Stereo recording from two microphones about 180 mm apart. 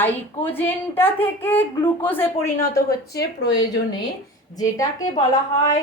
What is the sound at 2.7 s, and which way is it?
A woman's voice, 60° left (ahead or behind).